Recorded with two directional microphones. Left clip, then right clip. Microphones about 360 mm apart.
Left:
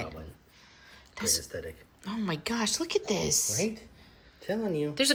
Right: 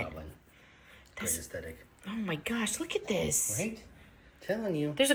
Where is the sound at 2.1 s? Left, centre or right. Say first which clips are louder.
Left 2 dB; centre.